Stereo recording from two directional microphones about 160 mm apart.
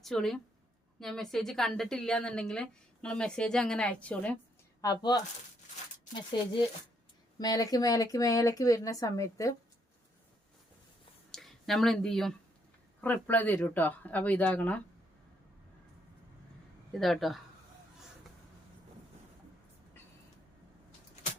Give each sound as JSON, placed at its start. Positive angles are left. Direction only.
{"t": 0.0, "sound": "a woman's voice", "side_deg": 0}
{"t": 4.8, "sound": "speech", "side_deg": 20}
{"t": 7.3, "sound": "speech", "side_deg": 25}
{"t": 11.3, "sound": "speech", "side_deg": 0}
{"t": 16.9, "sound": "a woman's voice", "side_deg": 0}